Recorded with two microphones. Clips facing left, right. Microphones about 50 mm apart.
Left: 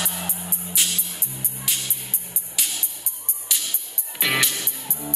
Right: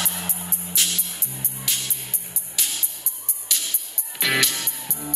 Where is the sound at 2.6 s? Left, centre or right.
Centre.